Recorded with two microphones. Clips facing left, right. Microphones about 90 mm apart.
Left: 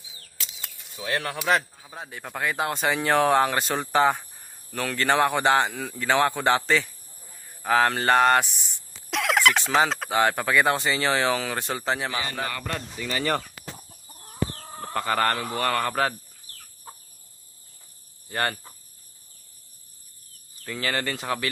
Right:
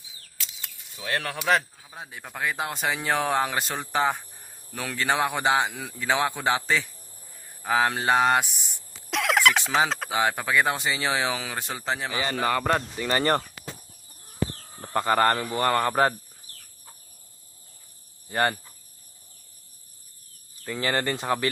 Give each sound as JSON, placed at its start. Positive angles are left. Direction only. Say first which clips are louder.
{"t": 0.3, "sound": "a sound", "louder": "left 1 dB", "side_deg": 15}
{"t": 2.0, "sound": "speech", "louder": "left 1 dB", "side_deg": 0}
{"t": 7.6, "sound": "mantra", "louder": "left 2 dB", "side_deg": -10}
{"t": 9.0, "sound": "speech", "louder": "even", "side_deg": 0}
{"t": 12.5, "sound": "speech", "louder": "right 8 dB", "side_deg": -55}
{"t": 14.5, "sound": "chicken", "louder": "left 7 dB", "side_deg": 70}
{"t": 14.9, "sound": "speech", "louder": "right 3 dB", "side_deg": -20}
{"t": 18.3, "sound": "mantra", "louder": "right 3 dB", "side_deg": -15}
{"t": 20.7, "sound": "speech", "louder": "right 2 dB", "side_deg": -20}